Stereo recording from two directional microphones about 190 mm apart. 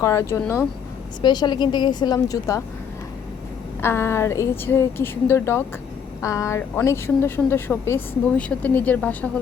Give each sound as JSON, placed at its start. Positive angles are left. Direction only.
{"t": 0.0, "sound": "a woman's voice", "side_deg": 15}
{"t": 3.8, "sound": "a woman's voice", "side_deg": 10}